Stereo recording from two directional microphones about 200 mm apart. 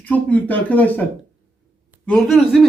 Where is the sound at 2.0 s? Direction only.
5° left (ahead or behind).